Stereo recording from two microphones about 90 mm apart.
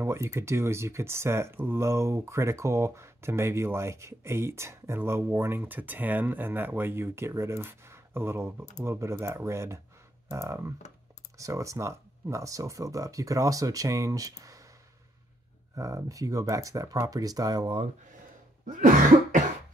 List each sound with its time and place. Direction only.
0.0 s speech: 30° right (ahead or behind)
15.7 s speech: 40° right (ahead or behind)